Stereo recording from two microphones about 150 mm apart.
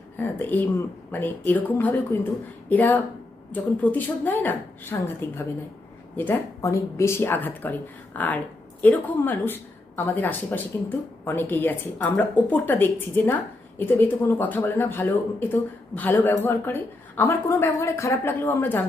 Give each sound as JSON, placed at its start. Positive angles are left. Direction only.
{"t": 0.2, "sound": "speech", "side_deg": 10}